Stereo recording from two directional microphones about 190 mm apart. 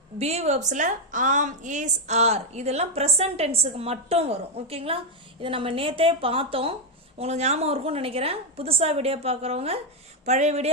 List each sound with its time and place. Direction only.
0.2 s a woman's voice: 35° right (ahead or behind)